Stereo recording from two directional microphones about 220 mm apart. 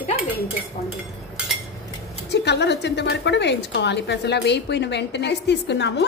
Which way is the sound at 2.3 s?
50° left (ahead or behind).